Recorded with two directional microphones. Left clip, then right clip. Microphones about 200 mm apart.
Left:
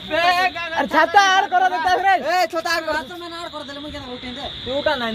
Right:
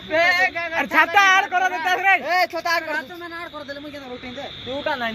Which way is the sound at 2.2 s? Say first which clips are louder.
Left 1 dB; 50° left (ahead or behind).